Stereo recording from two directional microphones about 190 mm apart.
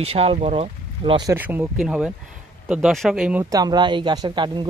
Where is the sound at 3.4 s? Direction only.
20° right (ahead or behind).